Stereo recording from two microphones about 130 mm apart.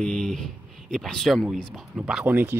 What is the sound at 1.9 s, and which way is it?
Speech, 10° right (ahead or behind).